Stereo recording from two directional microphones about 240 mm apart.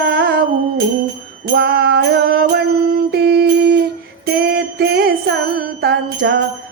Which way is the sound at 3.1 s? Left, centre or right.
Right.